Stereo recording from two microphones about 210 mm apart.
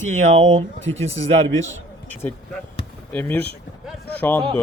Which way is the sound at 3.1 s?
10° left (ahead or behind).